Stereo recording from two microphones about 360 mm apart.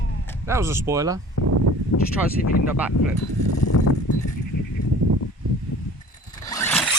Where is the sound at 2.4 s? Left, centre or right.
Left.